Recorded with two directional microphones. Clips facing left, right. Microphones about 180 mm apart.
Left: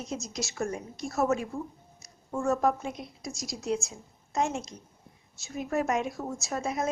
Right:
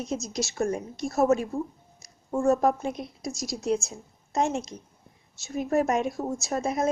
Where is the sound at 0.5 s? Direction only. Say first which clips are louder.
Right 5 dB; 30° right (ahead or behind).